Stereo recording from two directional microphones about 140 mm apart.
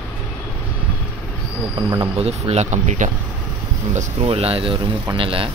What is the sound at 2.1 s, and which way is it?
Speech, 45° right (ahead or behind).